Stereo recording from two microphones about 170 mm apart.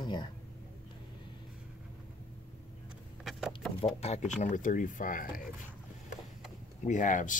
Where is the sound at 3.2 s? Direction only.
Centre (ahead or behind).